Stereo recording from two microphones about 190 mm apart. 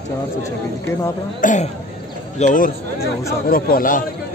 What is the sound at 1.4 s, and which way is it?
Speech, 40° left (ahead or behind).